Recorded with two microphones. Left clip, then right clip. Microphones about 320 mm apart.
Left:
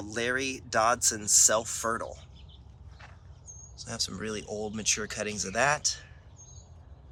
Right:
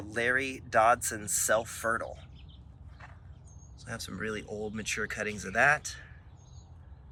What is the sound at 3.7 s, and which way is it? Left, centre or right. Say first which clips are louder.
Speech: left 5 dB; centre.